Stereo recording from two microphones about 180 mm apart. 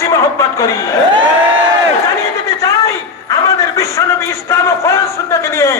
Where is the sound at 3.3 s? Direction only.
15° left (ahead or behind).